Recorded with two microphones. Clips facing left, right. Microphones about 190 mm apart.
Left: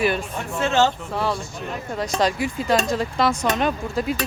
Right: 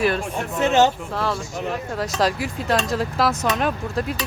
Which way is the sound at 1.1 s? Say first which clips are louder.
Even; centre (ahead or behind).